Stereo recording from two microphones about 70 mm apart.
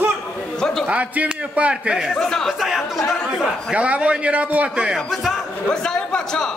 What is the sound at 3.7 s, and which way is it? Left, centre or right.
A man's voice, centre.